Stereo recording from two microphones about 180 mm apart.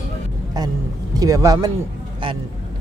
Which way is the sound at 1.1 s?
20° right (ahead or behind).